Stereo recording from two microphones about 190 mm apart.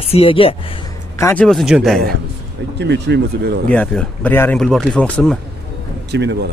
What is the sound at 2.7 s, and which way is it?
Speech, 65° right (ahead or behind).